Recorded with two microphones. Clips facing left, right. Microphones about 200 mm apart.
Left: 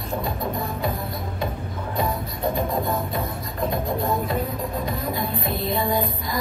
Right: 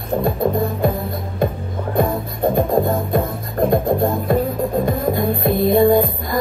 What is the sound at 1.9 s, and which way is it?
Music, 50° right (ahead or behind).